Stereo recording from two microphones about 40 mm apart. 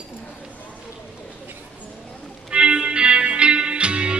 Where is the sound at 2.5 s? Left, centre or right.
Right.